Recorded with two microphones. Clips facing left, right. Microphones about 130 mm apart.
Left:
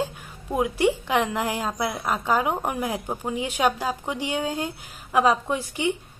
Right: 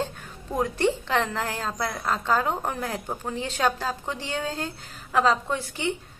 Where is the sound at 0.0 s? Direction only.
10° left (ahead or behind).